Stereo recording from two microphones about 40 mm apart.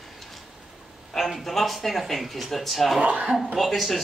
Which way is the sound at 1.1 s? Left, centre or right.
Centre.